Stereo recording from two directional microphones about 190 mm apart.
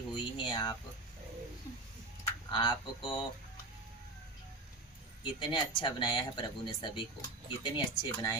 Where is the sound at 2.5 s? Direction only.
25° left (ahead or behind).